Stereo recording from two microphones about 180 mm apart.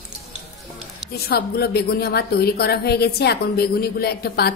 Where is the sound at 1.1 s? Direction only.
60° left (ahead or behind).